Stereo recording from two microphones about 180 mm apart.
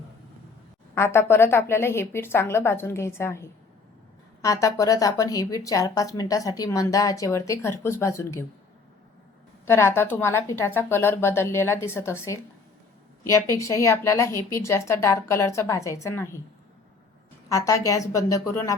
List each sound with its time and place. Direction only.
0.9 s a woman's voice: 15° left (ahead or behind)
9.6 s a woman's voice: 15° left (ahead or behind)
17.5 s a woman's voice: 20° left (ahead or behind)